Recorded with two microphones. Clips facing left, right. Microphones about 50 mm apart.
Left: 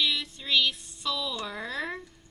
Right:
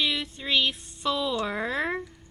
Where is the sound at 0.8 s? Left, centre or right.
Right.